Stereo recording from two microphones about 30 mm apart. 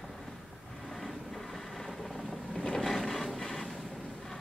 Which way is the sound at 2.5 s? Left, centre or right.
Left.